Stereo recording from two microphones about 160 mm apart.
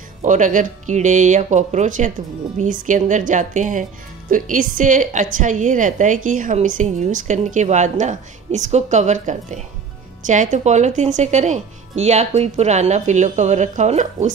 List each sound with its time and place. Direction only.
0.2 s a woman's voice: 50° right (ahead or behind)